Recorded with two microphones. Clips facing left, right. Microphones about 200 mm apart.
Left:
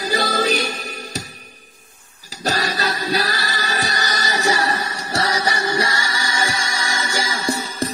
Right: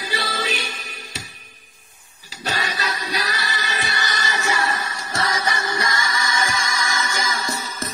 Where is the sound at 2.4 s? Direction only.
40° left (ahead or behind).